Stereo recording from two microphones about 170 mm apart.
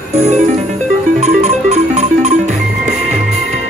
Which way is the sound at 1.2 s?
40° right (ahead or behind).